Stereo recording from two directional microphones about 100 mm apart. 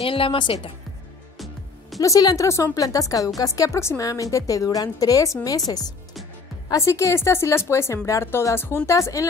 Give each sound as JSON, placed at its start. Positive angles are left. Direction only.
{"t": 0.0, "sound": "a woman's voice", "side_deg": 65}
{"t": 2.0, "sound": "a woman's voice", "side_deg": 35}
{"t": 6.7, "sound": "a woman's voice", "side_deg": 30}